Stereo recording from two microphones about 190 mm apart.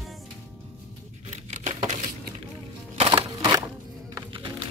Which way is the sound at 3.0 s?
25° right (ahead or behind).